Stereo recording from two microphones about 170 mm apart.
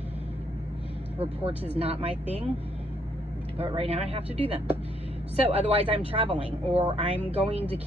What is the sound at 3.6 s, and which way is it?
A man's voice, 35° right (ahead or behind).